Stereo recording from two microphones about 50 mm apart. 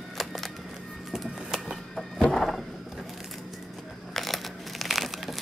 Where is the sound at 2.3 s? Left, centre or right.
Centre.